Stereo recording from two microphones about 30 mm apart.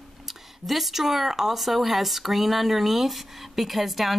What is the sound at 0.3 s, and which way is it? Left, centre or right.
Speech, centre.